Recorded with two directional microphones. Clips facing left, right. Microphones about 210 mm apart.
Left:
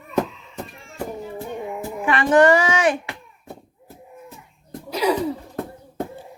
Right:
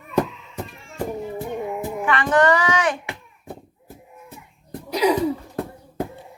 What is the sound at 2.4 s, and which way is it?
Speech, 25° left (ahead or behind).